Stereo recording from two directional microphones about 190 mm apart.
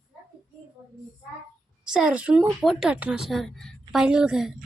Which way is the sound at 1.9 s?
5° right (ahead or behind).